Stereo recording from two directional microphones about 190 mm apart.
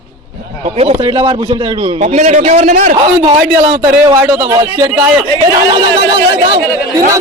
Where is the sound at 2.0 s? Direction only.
40° right (ahead or behind).